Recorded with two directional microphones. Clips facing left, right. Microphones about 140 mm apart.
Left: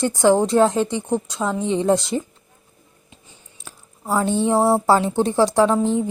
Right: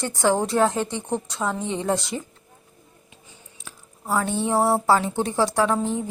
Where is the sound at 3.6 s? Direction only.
25° left (ahead or behind).